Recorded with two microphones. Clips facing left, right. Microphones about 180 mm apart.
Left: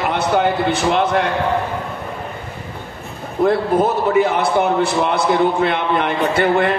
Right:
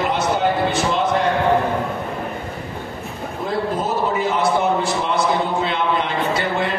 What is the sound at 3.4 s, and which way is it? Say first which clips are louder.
A man's voice: left 8 dB; 60° left (ahead or behind).